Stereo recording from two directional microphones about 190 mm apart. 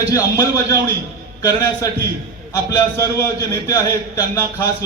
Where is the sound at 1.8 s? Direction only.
15° left (ahead or behind).